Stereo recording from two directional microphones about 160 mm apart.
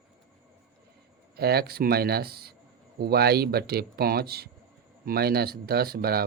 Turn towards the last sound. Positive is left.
turn(degrees=-70)  # may be behind; listen again after turning